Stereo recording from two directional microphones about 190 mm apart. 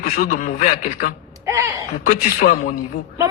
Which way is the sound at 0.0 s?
45° left (ahead or behind).